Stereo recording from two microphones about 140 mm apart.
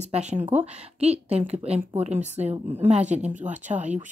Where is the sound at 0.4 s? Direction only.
10° right (ahead or behind).